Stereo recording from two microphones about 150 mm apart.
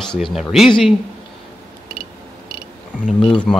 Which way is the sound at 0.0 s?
Centre (ahead or behind).